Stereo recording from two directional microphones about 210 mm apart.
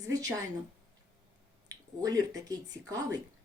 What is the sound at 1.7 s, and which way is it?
Speech, 15° right (ahead or behind).